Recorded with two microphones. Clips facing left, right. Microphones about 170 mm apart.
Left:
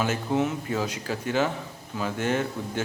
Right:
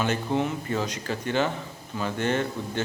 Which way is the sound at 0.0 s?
5° left (ahead or behind).